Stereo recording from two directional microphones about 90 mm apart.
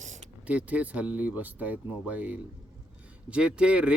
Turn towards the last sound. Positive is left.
turn(degrees=-10)  # may be behind; listen again after turning